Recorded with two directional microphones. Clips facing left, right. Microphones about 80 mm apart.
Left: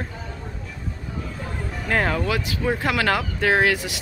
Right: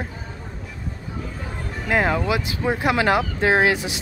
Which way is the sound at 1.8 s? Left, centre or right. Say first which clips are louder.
Right 2 dB; centre.